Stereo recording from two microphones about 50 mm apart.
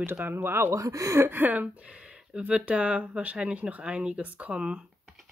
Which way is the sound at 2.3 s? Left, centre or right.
Right.